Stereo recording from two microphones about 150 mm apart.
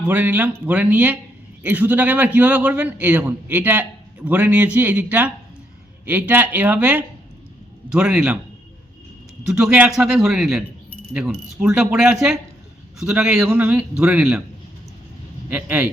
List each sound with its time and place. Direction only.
0.1 s a man's voice: 10° right (ahead or behind)
9.6 s a man's voice: 10° right (ahead or behind)
10.2 s cricket: 5° right (ahead or behind)
13.4 s a man's voice: 15° right (ahead or behind)
15.5 s a man's voice: 15° right (ahead or behind)